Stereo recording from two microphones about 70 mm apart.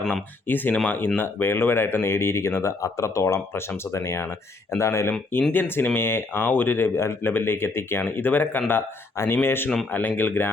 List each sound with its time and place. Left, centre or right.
0.1 s speech: left
5.3 s speech: left